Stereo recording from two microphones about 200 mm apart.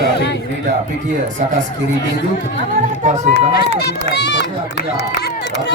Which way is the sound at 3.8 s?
55° left (ahead or behind).